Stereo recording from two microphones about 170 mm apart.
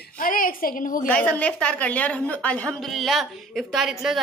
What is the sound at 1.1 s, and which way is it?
A woman's voice, 10° left (ahead or behind).